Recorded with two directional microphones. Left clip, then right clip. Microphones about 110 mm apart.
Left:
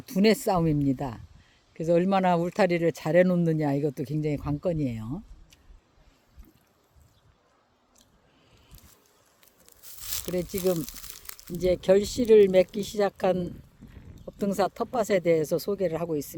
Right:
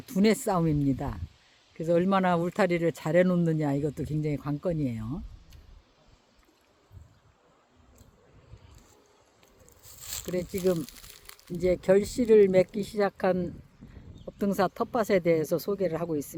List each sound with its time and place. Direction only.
0.0 s speech: 5° left (ahead or behind)
11.6 s speech: centre (ahead or behind)